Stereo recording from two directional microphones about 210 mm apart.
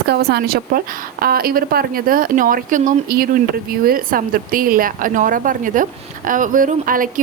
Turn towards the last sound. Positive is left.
turn(degrees=-40)  # may be behind; listen again after turning